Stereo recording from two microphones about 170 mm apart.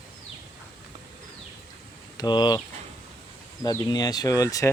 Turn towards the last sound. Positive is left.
turn(degrees=20)  # may be behind; listen again after turning